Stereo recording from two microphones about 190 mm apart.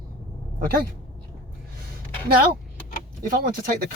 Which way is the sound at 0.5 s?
50° right (ahead or behind).